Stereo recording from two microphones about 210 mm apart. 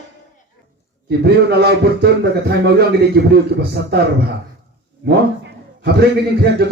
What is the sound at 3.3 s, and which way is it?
Speech, 50° right (ahead or behind).